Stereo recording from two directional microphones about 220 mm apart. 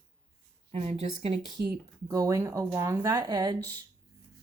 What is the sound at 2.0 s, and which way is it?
Speech, 15° right (ahead or behind).